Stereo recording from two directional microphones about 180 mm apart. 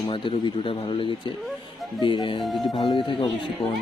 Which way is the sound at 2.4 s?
Centre (ahead or behind).